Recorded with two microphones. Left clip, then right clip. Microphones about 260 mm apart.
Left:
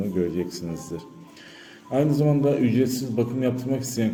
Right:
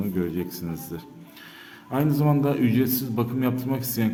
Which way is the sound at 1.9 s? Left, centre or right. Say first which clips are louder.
Left 2 dB; centre.